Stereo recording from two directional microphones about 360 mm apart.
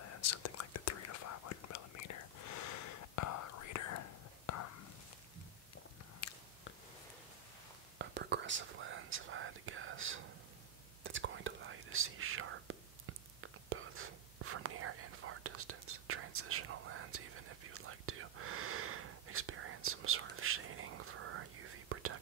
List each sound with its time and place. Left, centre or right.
0.0 s whispering: left
6.2 s biting: left
8.0 s whispering: right